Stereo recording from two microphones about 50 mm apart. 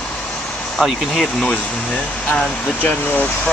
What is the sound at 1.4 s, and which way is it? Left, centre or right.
Speech, left.